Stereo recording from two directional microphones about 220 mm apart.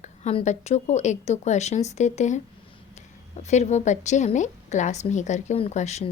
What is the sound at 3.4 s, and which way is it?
A woman's voice, 30° left (ahead or behind).